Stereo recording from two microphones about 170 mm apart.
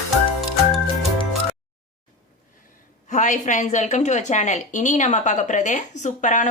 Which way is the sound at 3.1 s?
45° left (ahead or behind).